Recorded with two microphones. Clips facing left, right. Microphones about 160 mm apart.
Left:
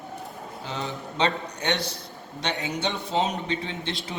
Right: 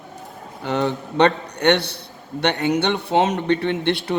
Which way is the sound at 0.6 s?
65° right (ahead or behind).